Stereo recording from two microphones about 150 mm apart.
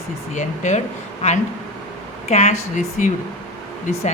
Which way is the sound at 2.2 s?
45° left (ahead or behind).